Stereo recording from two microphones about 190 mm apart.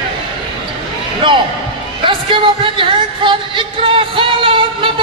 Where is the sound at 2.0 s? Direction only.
25° right (ahead or behind).